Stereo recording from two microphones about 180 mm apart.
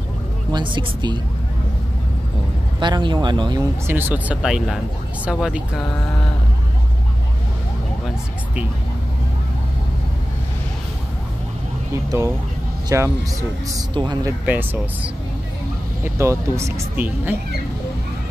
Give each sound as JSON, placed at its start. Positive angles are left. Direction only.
{"t": 0.5, "sound": "speech", "side_deg": -25}
{"t": 2.8, "sound": "speech", "side_deg": -25}
{"t": 3.8, "sound": "speech", "side_deg": -10}
{"t": 12.1, "sound": "speech", "side_deg": -15}
{"t": 14.4, "sound": "speech", "side_deg": -10}
{"t": 16.0, "sound": "speech", "side_deg": -15}